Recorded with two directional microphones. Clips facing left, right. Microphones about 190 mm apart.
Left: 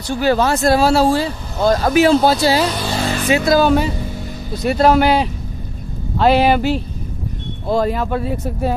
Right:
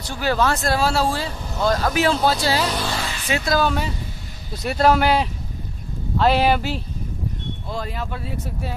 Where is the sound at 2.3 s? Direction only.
5° left (ahead or behind).